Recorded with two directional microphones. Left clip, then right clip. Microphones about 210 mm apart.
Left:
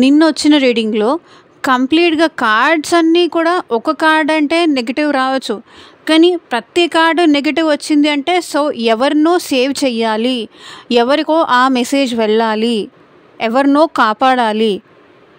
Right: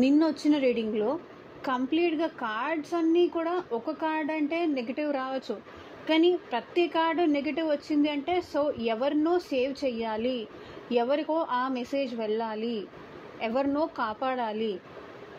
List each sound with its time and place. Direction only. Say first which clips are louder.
0.0 s speech: left 14 dB; 50° left (ahead or behind)